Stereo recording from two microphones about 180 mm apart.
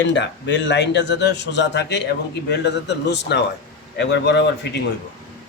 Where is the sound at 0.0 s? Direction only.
80° left.